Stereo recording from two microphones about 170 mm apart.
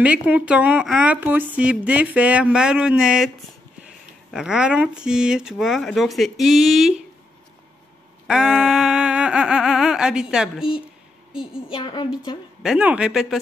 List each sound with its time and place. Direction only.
0.0 s speech: 5° right (ahead or behind)
4.3 s speech: 5° right (ahead or behind)
8.3 s speech: 5° right (ahead or behind)
11.7 s a woman's voice: 25° left (ahead or behind)
12.6 s speech: 5° right (ahead or behind)